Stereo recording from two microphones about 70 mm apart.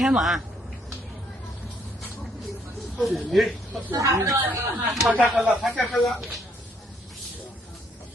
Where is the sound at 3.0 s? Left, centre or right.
Centre.